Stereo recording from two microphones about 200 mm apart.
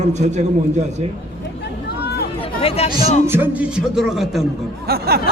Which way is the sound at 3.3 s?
10° right (ahead or behind).